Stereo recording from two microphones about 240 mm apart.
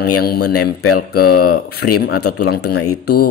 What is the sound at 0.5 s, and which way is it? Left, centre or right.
Speech, left.